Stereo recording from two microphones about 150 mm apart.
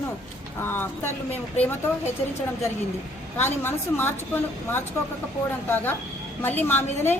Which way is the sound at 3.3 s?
15° left (ahead or behind).